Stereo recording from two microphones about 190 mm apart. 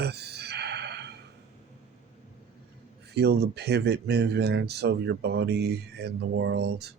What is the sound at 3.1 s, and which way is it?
Speech, 60° right (ahead or behind).